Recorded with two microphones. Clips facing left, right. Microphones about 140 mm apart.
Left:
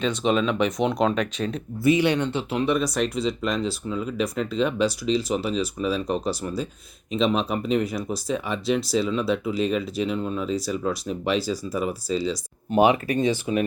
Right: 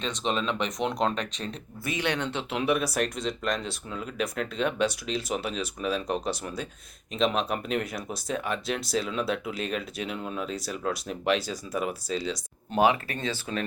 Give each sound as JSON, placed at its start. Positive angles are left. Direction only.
{"t": 0.0, "sound": "speech", "side_deg": 5}
{"t": 12.7, "sound": "speech", "side_deg": 15}